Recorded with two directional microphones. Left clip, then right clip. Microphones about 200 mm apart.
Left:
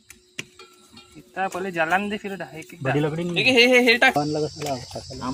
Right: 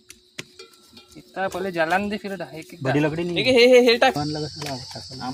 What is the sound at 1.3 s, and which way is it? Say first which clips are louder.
Speech: even; 15° right (ahead or behind).